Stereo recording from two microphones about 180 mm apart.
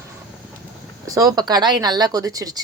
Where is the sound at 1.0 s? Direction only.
20° right (ahead or behind).